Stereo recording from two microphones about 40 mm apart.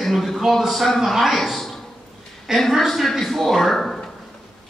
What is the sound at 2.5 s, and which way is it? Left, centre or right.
Speech, centre.